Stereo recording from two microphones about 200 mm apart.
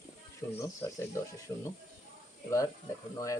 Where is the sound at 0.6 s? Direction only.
15° left (ahead or behind).